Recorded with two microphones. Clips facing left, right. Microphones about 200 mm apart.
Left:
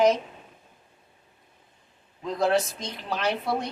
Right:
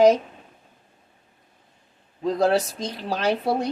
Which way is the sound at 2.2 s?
40° right (ahead or behind).